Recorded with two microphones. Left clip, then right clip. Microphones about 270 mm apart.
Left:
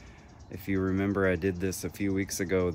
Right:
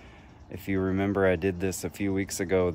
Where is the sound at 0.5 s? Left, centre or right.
Centre.